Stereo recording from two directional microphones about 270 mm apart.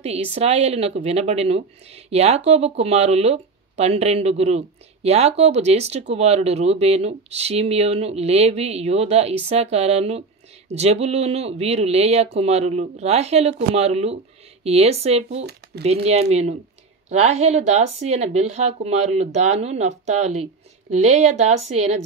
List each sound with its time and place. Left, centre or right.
0.0 s speech: right